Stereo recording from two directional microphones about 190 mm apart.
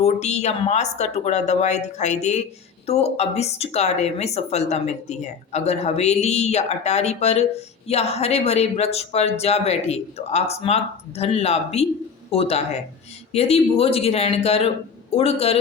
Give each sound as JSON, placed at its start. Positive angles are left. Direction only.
{"t": 0.0, "sound": "speech", "side_deg": 35}